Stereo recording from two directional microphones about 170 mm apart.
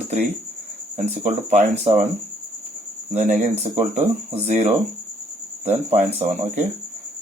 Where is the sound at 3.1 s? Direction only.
45° right (ahead or behind).